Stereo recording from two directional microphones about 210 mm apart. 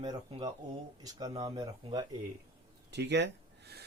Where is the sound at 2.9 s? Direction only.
55° right (ahead or behind).